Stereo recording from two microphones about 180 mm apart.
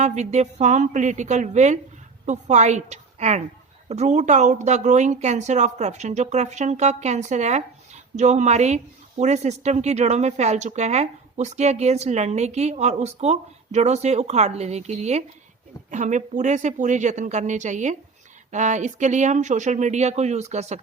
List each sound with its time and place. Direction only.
0.0 s a woman's voice: 40° right (ahead or behind)